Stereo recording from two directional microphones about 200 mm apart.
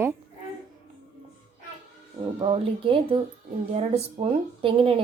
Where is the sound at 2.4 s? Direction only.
25° right (ahead or behind).